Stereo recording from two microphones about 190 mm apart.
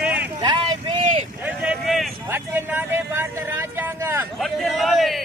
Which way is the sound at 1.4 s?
5° right (ahead or behind).